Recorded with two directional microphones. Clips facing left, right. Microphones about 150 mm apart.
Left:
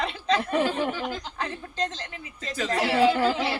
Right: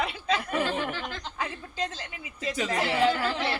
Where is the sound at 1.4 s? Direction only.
10° right (ahead or behind).